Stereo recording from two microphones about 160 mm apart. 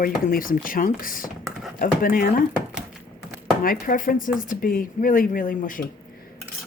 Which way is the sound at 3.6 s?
60° left (ahead or behind).